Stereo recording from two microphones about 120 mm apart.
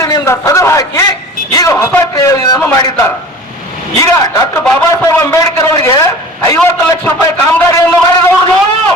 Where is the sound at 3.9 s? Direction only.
25° left (ahead or behind).